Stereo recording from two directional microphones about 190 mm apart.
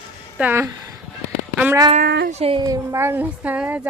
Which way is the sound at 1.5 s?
10° right (ahead or behind).